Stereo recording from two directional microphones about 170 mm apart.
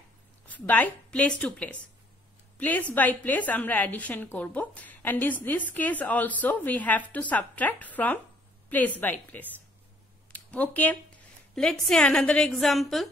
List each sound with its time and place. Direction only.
0.5 s a woman's voice: 10° left (ahead or behind)